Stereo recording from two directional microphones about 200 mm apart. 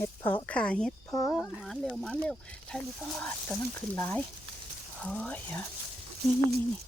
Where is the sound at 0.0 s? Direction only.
15° left (ahead or behind).